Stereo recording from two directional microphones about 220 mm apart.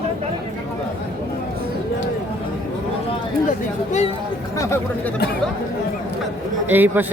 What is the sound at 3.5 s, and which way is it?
Chatter, 30° left (ahead or behind).